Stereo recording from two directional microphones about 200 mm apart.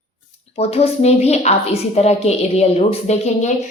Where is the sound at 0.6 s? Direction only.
30° left (ahead or behind).